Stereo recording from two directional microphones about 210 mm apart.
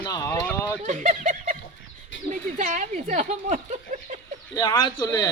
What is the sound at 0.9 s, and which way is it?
Speech, 35° right (ahead or behind).